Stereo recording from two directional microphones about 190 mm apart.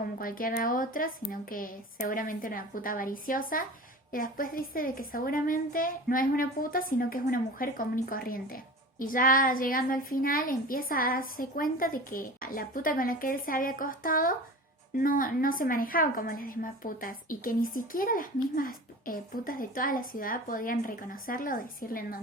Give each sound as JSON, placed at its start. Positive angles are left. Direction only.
{"t": 0.2, "sound": "a child's voice", "side_deg": 50}